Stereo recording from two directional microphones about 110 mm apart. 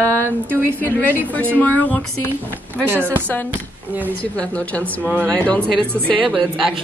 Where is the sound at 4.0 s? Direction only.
10° left (ahead or behind).